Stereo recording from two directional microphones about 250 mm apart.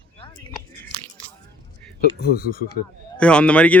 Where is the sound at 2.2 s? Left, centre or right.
Left.